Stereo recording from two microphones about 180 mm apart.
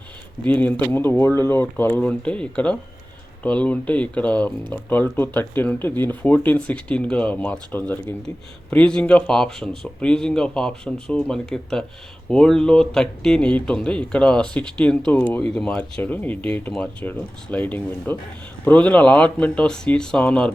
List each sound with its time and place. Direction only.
0.4 s speech: 10° left (ahead or behind)